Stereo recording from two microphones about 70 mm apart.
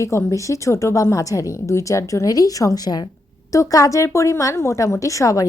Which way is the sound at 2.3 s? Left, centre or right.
Left.